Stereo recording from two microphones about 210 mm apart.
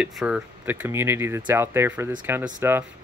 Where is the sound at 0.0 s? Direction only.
5° right (ahead or behind).